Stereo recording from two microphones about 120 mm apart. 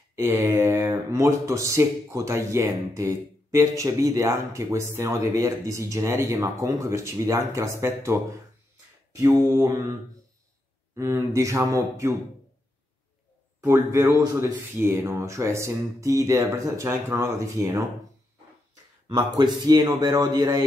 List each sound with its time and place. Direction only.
0.1 s speech: 25° right (ahead or behind)
9.1 s mantra: 25° right (ahead or behind)
9.5 s speech: 25° right (ahead or behind)
11.0 s speech: 25° right (ahead or behind)
13.6 s speech: 25° right (ahead or behind)
19.0 s speech: 35° right (ahead or behind)